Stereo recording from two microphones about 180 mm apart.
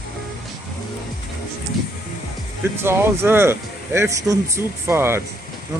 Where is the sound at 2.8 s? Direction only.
15° right (ahead or behind).